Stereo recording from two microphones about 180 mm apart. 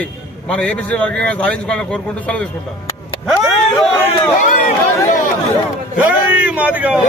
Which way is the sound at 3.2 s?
Centre (ahead or behind).